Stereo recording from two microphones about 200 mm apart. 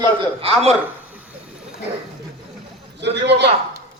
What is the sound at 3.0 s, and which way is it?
Speech, 60° right (ahead or behind).